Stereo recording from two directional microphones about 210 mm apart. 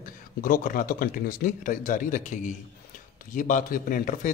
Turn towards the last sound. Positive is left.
turn(degrees=40)  # may be behind; listen again after turning